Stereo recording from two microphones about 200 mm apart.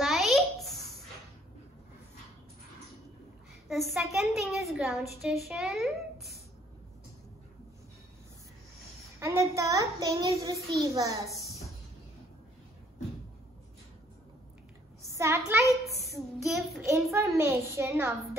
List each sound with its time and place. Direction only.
0.0 s babbling: centre (ahead or behind)
4.0 s a child's voice: centre (ahead or behind)
9.2 s a woman's voice: 15° right (ahead or behind)
11.2 s a sound: 15° left (ahead or behind)
15.1 s a child's voice: 15° right (ahead or behind)
15.8 s child singing: centre (ahead or behind)
16.8 s a woman's voice: 15° right (ahead or behind)